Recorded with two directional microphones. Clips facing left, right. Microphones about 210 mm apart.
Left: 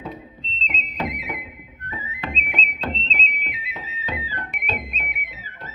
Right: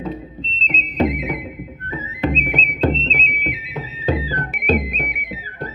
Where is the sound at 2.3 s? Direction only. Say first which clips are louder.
Right 9 dB; 35° right (ahead or behind).